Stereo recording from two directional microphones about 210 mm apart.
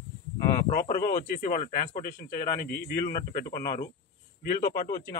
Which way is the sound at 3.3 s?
45° left (ahead or behind).